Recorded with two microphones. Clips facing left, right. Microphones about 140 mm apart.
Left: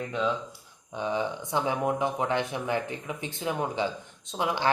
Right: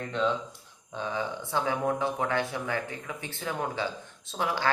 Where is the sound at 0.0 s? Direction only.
10° left (ahead or behind).